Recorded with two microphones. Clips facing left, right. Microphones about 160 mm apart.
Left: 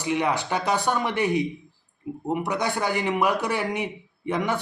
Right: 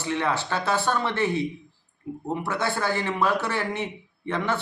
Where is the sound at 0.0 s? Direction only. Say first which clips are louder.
Left 2 dB; 15° left (ahead or behind).